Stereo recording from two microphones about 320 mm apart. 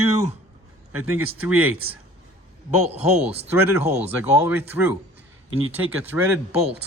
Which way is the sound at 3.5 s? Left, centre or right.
Centre.